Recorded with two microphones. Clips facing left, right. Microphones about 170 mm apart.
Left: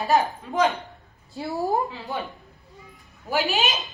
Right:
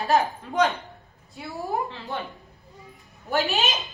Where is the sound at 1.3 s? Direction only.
35° left (ahead or behind).